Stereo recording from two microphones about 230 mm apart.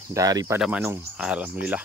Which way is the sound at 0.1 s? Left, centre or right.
Centre.